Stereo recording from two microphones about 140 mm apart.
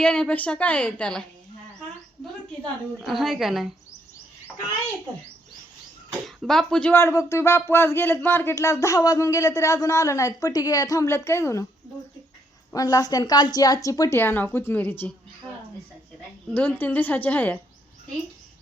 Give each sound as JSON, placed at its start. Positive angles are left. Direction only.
{"t": 0.0, "sound": "a woman's voice", "side_deg": 5}
{"t": 3.0, "sound": "a woman's voice", "side_deg": 0}
{"t": 6.2, "sound": "a woman's voice", "side_deg": 0}
{"t": 6.9, "sound": "speech", "side_deg": 20}
{"t": 12.7, "sound": "speech", "side_deg": 25}
{"t": 14.2, "sound": "a woman's voice", "side_deg": 15}
{"t": 16.6, "sound": "a woman's voice", "side_deg": 15}